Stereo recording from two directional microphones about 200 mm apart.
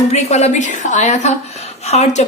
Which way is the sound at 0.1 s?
35° left (ahead or behind).